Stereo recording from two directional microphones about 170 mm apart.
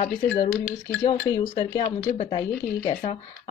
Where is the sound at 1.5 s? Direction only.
30° left (ahead or behind).